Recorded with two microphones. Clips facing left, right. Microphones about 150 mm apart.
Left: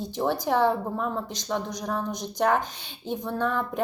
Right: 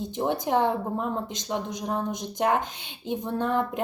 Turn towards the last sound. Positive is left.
turn(degrees=-20)  # may be behind; listen again after turning